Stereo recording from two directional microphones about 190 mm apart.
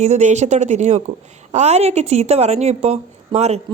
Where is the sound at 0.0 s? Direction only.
35° right (ahead or behind).